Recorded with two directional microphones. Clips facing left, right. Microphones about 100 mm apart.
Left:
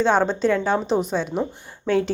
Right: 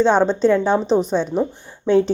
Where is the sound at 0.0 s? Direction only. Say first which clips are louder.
Right 4 dB; 20° right (ahead or behind).